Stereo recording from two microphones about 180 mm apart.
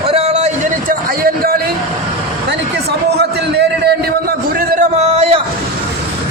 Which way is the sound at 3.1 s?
65° right (ahead or behind).